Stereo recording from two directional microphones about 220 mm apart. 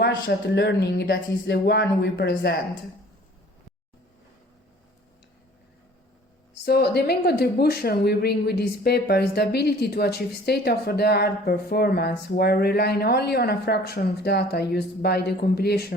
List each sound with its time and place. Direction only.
0.3 s speech: 50° left (ahead or behind)
6.7 s speech: 45° left (ahead or behind)